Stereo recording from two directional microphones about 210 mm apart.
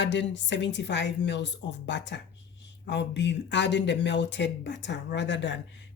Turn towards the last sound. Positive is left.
turn(degrees=60)  # may be behind; listen again after turning